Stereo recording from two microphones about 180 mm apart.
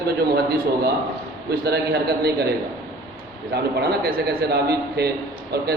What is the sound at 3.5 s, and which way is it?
A man's voice, 60° right (ahead or behind).